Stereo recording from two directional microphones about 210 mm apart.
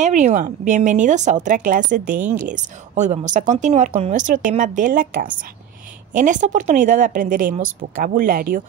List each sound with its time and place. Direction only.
0.0 s speech: 35° right (ahead or behind)